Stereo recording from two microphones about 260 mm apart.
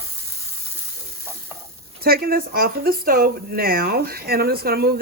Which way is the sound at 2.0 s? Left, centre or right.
Right.